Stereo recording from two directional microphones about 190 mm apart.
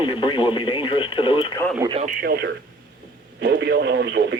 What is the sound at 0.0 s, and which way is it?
Speech, 25° left (ahead or behind).